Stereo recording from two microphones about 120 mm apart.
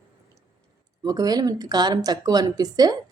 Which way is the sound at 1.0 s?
30° right (ahead or behind).